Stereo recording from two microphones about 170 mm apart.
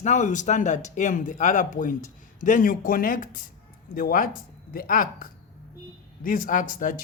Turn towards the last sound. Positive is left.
turn(degrees=50)  # may be behind; listen again after turning